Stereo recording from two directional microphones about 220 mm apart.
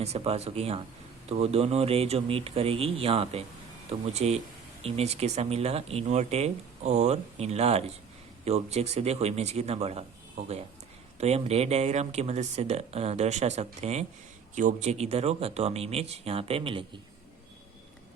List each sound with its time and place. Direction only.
0.0 s speech: 30° right (ahead or behind)